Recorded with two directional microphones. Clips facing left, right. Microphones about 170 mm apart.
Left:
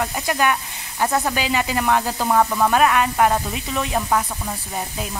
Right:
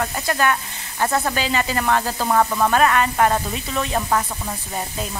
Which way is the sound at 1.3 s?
10° left (ahead or behind).